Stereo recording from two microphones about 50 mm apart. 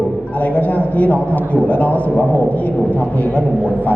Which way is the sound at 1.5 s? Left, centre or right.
Left.